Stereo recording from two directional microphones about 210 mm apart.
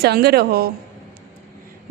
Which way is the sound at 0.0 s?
50° right (ahead or behind).